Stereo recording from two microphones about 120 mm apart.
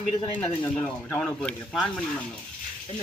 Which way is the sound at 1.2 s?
5° left (ahead or behind).